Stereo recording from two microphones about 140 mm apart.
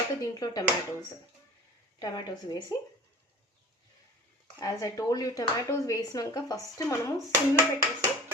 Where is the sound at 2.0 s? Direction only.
30° left (ahead or behind).